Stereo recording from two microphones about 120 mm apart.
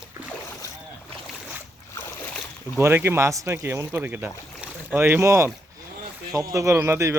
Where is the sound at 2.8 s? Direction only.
20° right (ahead or behind).